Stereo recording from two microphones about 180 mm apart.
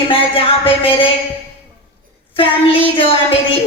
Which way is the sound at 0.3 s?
30° left (ahead or behind).